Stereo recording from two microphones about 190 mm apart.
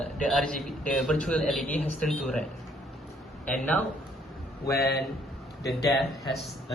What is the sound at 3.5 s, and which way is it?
Speech, 5° left (ahead or behind).